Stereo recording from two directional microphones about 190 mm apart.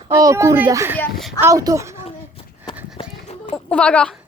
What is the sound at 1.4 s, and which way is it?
Speech, 15° right (ahead or behind).